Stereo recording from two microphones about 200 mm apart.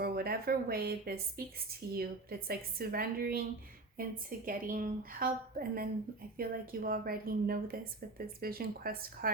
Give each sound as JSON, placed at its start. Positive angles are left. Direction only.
{"t": 0.0, "sound": "a woman's voice", "side_deg": -50}